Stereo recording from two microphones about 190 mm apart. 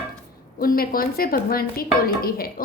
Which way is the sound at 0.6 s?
50° left (ahead or behind).